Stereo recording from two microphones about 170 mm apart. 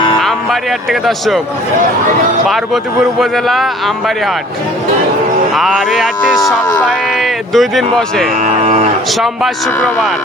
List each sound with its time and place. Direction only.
0.9 s a man's voice: centre (ahead or behind)
3.2 s a man's voice: centre (ahead or behind)
5.5 s a man's voice: centre (ahead or behind)
8.6 s cattle: 40° right (ahead or behind)
9.2 s a man's voice: centre (ahead or behind)